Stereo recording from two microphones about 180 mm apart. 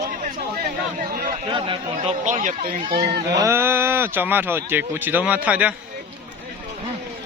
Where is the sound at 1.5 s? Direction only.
30° right (ahead or behind); by 2.8 s 50° right (ahead or behind).